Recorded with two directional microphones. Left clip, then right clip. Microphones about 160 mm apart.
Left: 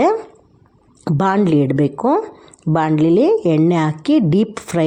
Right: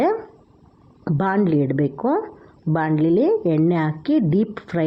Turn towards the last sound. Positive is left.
turn(degrees=30)  # may be behind; listen again after turning